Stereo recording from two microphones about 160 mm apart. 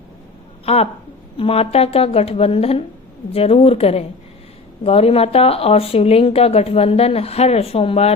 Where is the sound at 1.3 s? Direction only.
35° left (ahead or behind).